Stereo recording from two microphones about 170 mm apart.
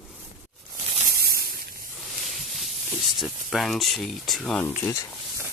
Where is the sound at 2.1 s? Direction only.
Centre (ahead or behind).